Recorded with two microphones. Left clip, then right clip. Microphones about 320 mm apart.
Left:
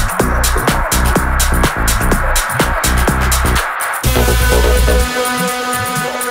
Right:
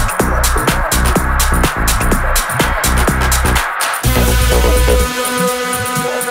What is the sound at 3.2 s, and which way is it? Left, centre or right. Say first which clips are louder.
Music: right 1 dB; right.